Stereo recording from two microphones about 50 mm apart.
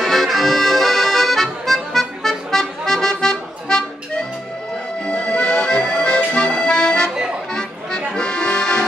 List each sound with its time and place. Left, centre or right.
0.0 s accordion: centre
5.0 s accordion: left